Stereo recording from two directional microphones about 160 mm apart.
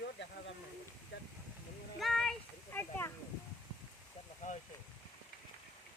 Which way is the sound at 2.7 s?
15° left (ahead or behind).